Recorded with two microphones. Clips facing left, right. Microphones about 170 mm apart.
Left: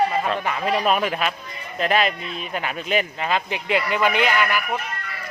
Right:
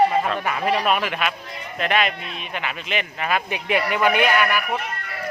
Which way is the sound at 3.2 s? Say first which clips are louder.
Even; 25° left (ahead or behind).